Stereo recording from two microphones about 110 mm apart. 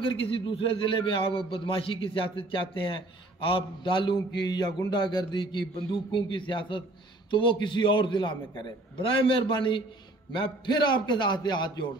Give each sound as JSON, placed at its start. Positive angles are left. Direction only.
{"t": 0.0, "sound": "a man's voice", "side_deg": 55}